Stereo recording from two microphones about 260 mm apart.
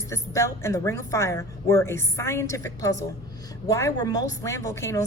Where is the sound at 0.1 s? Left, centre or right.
Centre.